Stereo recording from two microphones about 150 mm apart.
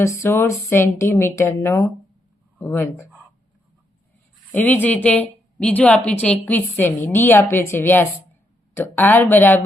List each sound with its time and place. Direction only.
0.0 s a woman's voice: 20° left (ahead or behind)
4.5 s a woman's voice: 10° left (ahead or behind)